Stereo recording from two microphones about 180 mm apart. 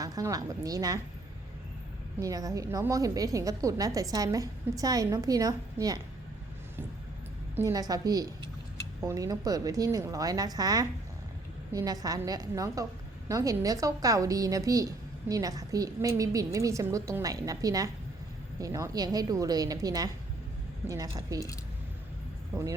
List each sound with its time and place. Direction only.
0.0 s a woman's voice: 20° right (ahead or behind)
2.2 s a woman's voice: 20° right (ahead or behind)
7.5 s a woman's voice: 20° right (ahead or behind)